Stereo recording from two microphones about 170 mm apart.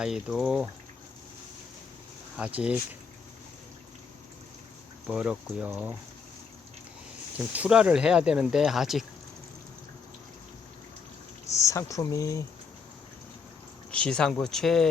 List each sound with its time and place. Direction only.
0.0 s speech: 5° right (ahead or behind)
2.3 s speech: 5° right (ahead or behind)
5.0 s speech: 5° right (ahead or behind)
7.3 s speech: 10° right (ahead or behind)
11.5 s speech: 15° left (ahead or behind)
13.9 s speech: 5° left (ahead or behind)